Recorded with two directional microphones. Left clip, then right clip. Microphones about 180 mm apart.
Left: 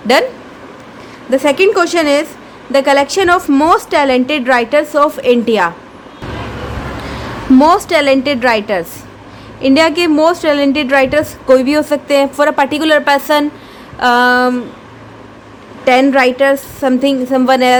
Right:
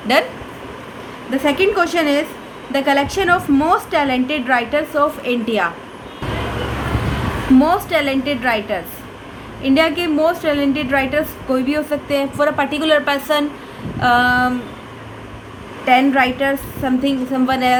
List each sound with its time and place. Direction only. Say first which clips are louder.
0.1 s a woman's voice: left 5 dB; 60° left (ahead or behind)
1.3 s a woman's voice: left 6 dB; 65° left (ahead or behind)
7.6 s a woman's voice: left 7 dB; 70° left (ahead or behind)
15.8 s a woman's voice: left 4 dB; 65° left (ahead or behind)